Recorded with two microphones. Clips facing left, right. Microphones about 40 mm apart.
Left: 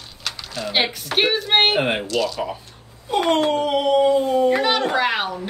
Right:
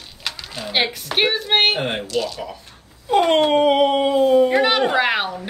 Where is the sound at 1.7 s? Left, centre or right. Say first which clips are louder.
Left 3 dB; left.